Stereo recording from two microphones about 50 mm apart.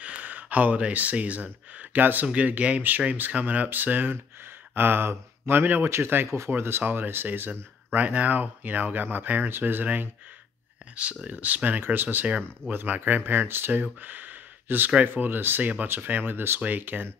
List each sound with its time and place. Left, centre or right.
0.0 s speech: right
2.2 s speech: right
11.2 s speech: right
12.3 s speech: right
12.7 s speech: right
14.0 s a sound: right
15.1 s speech: right